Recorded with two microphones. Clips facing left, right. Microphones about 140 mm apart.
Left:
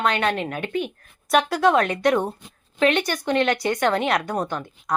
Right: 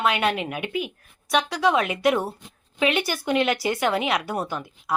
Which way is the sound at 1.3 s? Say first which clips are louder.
Left 3 dB; centre (ahead or behind).